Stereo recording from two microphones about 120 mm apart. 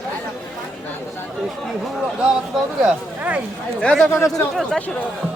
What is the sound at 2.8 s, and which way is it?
Speech, 15° right (ahead or behind).